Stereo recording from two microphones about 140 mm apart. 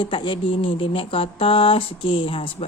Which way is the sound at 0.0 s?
35° left (ahead or behind).